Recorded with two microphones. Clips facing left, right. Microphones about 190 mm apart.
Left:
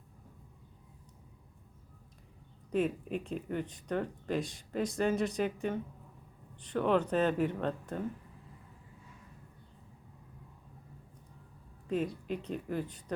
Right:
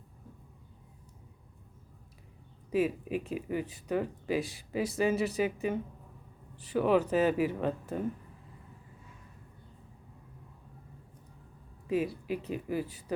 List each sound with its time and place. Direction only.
2.6 s speech: 5° right (ahead or behind)
11.9 s speech: 5° right (ahead or behind)